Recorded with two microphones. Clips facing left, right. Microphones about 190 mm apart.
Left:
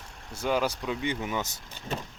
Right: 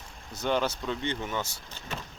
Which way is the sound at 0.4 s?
10° left (ahead or behind).